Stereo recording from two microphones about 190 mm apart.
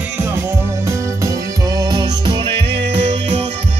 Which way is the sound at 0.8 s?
20° right (ahead or behind).